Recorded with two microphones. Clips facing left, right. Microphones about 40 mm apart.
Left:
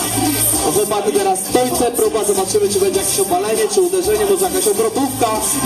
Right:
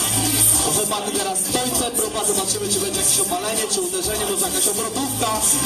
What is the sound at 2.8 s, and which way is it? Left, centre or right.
Music, left.